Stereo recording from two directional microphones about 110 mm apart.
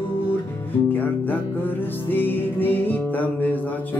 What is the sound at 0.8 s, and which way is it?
Music, 15° left (ahead or behind).